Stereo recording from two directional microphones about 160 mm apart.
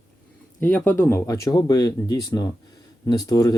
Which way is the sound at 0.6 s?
10° left (ahead or behind).